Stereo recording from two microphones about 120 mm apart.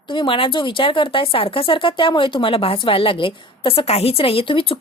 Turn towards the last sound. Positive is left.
turn(degrees=45)  # may be behind; listen again after turning